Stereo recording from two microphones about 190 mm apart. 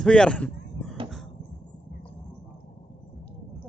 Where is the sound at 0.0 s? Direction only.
5° left (ahead or behind).